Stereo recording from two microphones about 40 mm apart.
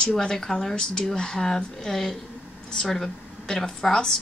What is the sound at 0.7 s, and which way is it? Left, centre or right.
Speech, left.